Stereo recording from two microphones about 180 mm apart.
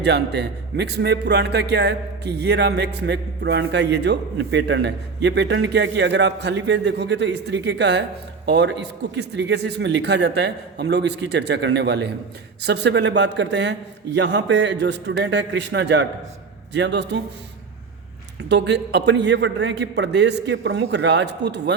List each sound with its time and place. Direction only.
0.0 s a man's voice: 70° right (ahead or behind)
18.4 s a man's voice: 75° right (ahead or behind)